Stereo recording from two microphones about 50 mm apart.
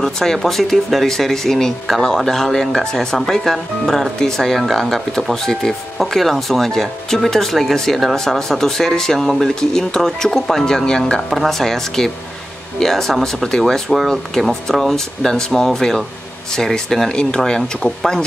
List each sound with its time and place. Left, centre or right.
0.0 s speech: centre
17.1 s speech: centre